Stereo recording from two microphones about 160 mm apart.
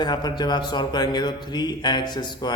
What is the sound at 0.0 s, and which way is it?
Speech, 25° left (ahead or behind).